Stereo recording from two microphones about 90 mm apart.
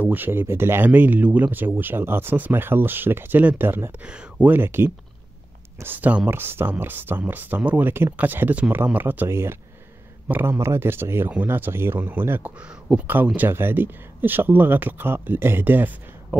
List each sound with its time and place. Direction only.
0.0 s speech: 20° right (ahead or behind)
4.0 s speech: 10° right (ahead or behind)